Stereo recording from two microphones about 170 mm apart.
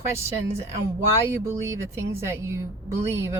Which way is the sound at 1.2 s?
15° right (ahead or behind).